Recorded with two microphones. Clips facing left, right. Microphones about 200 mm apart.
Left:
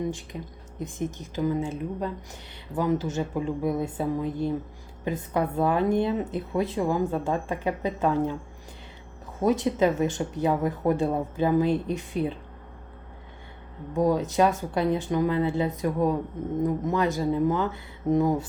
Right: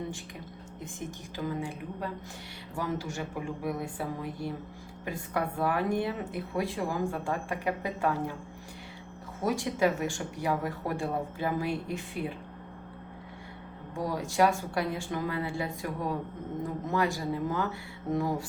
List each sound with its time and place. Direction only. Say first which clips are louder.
0.8 s speech: left 9 dB; 20° left (ahead or behind)
9.4 s speech: left 5 dB; 20° left (ahead or behind)
13.9 s speech: left 8 dB; 20° left (ahead or behind)